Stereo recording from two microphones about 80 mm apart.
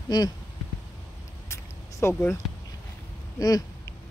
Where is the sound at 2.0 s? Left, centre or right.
Left.